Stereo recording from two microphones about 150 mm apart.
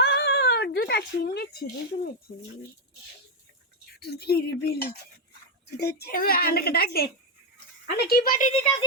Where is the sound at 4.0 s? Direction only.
90° left.